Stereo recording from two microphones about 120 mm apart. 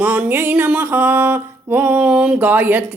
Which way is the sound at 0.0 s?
15° right (ahead or behind).